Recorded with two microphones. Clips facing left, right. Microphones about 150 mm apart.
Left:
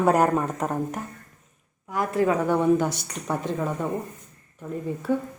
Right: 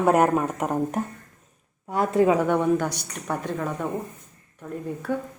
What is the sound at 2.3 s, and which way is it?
A woman's voice, 5° left (ahead or behind).